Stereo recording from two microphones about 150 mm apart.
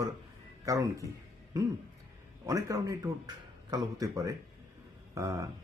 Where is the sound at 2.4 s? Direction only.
25° right (ahead or behind).